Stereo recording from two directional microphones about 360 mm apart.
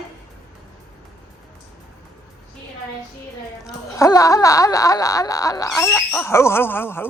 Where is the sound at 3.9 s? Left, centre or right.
Centre.